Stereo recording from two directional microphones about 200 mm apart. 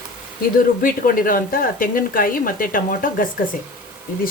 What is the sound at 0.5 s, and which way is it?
Speech, 45° left (ahead or behind).